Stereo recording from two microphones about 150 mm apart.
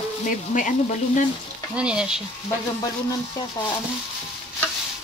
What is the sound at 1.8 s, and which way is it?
Speech, 5° right (ahead or behind).